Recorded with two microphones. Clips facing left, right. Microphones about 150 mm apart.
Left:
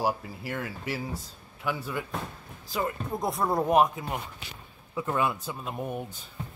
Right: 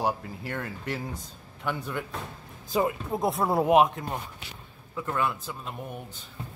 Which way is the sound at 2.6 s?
20° right (ahead or behind).